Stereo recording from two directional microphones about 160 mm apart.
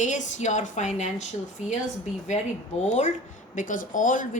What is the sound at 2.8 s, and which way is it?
A woman's voice, 50° left (ahead or behind).